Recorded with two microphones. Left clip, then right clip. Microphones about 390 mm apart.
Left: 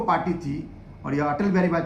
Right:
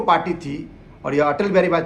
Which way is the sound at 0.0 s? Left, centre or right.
Centre.